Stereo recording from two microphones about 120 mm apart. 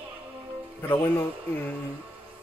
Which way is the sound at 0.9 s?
20° left (ahead or behind).